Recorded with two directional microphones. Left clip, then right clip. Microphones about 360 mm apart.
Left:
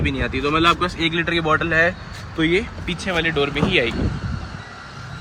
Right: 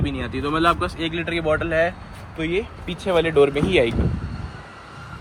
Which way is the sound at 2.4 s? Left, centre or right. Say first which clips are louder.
Left 5 dB; right.